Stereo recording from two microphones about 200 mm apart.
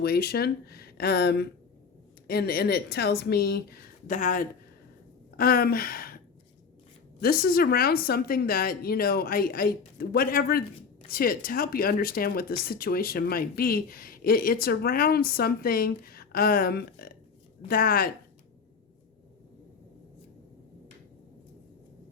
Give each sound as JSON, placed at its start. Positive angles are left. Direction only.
{"t": 0.0, "sound": "speech", "side_deg": 50}